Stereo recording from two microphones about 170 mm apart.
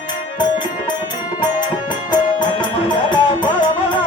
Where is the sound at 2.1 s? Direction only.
25° left (ahead or behind).